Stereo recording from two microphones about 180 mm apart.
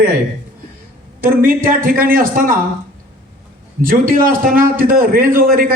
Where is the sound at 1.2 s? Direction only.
50° right (ahead or behind).